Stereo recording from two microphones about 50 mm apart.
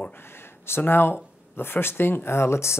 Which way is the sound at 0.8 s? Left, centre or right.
Left.